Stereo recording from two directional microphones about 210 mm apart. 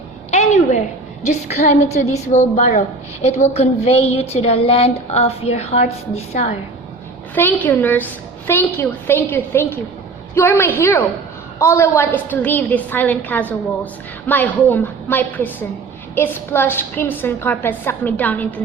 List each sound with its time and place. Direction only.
0.3 s a sound: 30° left (ahead or behind)
1.2 s a woman's voice: 30° left (ahead or behind)
7.3 s a woman's voice: 10° left (ahead or behind)